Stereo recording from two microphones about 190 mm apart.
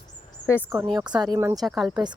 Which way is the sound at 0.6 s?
10° right (ahead or behind).